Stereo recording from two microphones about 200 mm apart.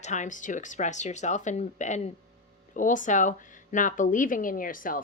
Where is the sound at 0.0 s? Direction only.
35° left (ahead or behind).